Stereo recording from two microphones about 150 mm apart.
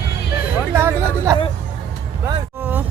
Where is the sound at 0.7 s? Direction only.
15° right (ahead or behind).